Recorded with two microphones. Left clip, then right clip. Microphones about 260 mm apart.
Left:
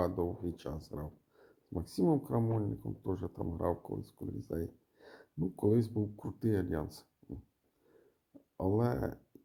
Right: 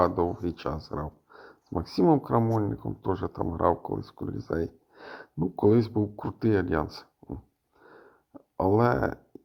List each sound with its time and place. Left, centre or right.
0.0 s speech: centre
8.5 s speech: centre